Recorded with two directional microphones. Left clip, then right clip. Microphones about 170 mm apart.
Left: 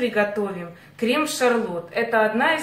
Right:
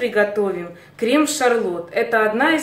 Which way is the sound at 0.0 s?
50° right (ahead or behind).